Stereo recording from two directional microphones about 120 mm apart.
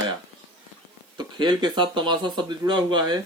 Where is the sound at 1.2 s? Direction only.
40° right (ahead or behind).